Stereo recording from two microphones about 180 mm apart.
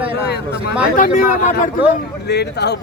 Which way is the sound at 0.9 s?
50° left (ahead or behind).